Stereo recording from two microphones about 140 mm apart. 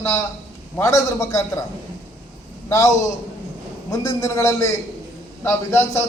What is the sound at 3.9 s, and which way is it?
A man's voice, 25° left (ahead or behind).